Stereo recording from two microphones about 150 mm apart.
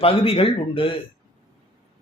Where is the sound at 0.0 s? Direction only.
40° left (ahead or behind).